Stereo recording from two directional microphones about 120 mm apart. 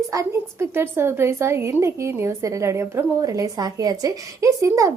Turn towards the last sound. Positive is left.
turn(degrees=-25)  # may be behind; listen again after turning